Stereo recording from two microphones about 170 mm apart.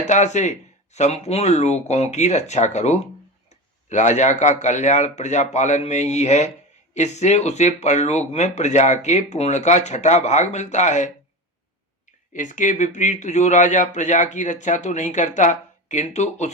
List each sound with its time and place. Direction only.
0.1 s speech: 45° left (ahead or behind)
12.3 s speech: 50° left (ahead or behind)